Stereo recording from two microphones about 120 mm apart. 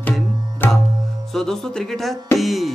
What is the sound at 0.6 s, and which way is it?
Tabla, 15° left (ahead or behind).